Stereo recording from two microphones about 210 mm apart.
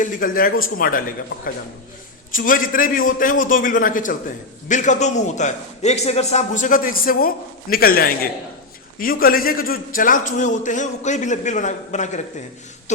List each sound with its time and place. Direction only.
0.0 s a man's voice: 40° left (ahead or behind)